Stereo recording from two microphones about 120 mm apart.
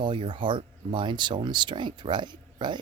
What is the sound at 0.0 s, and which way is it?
Speech, 40° right (ahead or behind).